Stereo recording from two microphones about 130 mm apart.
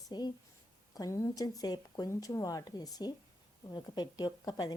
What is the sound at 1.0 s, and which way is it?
Speech, 25° left (ahead or behind).